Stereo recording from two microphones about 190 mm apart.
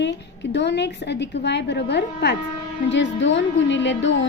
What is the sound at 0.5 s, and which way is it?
A woman's voice, 65° left (ahead or behind).